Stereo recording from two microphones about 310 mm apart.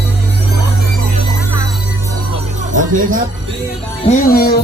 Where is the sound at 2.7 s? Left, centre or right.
Right.